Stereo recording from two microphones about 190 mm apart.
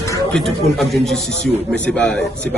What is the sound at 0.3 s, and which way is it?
A man's voice, centre (ahead or behind).